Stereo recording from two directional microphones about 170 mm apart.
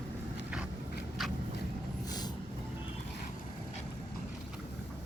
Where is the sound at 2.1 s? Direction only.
25° left (ahead or behind).